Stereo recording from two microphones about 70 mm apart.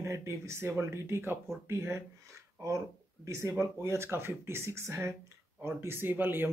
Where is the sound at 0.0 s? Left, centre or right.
Right.